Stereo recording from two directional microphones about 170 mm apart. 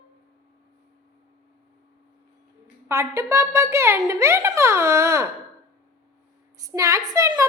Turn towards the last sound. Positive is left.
turn(degrees=-20)  # may be behind; listen again after turning